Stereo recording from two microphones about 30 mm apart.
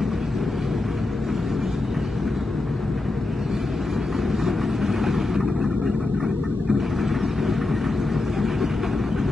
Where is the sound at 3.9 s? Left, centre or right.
Centre.